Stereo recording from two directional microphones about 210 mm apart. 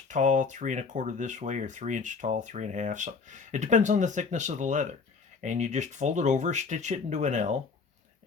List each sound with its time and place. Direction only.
0.1 s speech: 35° right (ahead or behind)